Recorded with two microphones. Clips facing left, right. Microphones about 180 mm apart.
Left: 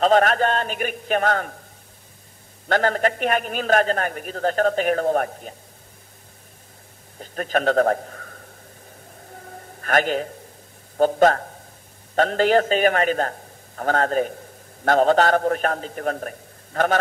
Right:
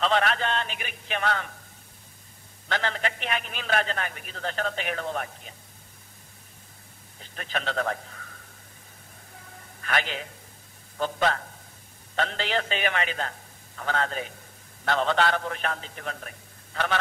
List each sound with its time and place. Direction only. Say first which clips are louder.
0.0 s a man's voice: left 8 dB; 45° left (ahead or behind)
2.7 s a man's voice: left 9 dB; 45° left (ahead or behind)
7.2 s a man's voice: left 10 dB; 45° left (ahead or behind)
9.8 s a man's voice: left 9 dB; 45° left (ahead or behind)